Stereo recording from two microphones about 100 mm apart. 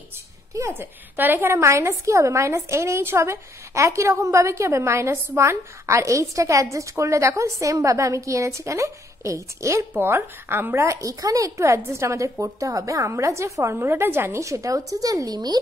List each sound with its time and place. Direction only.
0.6 s a woman's voice: 25° right (ahead or behind); by 15.6 s 40° right (ahead or behind)